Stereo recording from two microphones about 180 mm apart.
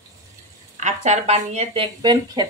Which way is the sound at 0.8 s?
40° right (ahead or behind).